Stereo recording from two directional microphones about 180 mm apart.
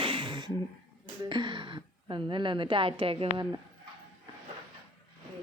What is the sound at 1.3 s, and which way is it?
A woman's voice, 25° right (ahead or behind).